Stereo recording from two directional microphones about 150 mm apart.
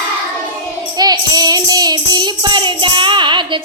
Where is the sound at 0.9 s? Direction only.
25° right (ahead or behind).